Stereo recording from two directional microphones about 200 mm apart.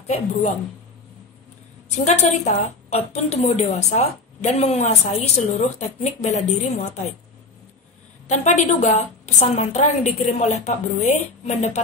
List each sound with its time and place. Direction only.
0.0 s speech: 30° left (ahead or behind)
2.0 s a woman's voice: 35° left (ahead or behind)
8.3 s a woman's voice: 35° left (ahead or behind)